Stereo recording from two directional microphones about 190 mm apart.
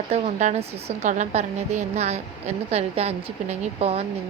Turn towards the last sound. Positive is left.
turn(degrees=-35)  # may be behind; listen again after turning